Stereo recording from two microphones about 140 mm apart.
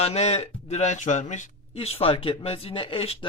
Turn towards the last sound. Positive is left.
turn(degrees=40)  # may be behind; listen again after turning